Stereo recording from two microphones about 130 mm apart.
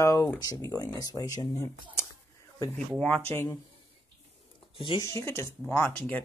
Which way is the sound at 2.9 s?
5° left (ahead or behind).